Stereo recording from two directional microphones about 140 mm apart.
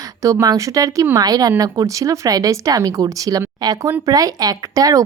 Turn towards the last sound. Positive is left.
turn(degrees=-25)  # may be behind; listen again after turning